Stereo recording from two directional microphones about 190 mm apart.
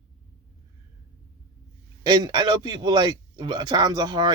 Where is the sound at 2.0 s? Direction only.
20° right (ahead or behind).